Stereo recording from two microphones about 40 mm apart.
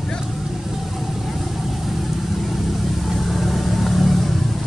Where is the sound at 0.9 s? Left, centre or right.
Centre.